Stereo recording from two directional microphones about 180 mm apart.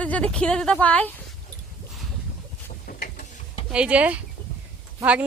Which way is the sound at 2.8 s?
55° left (ahead or behind).